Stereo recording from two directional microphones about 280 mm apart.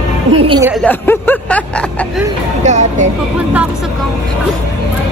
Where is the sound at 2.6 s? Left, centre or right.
Right.